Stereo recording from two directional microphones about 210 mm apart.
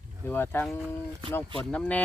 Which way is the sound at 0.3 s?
10° left (ahead or behind).